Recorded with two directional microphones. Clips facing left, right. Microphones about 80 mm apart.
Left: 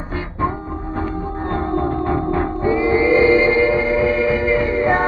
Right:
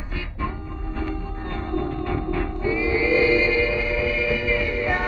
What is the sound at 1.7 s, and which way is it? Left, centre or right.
Music, left.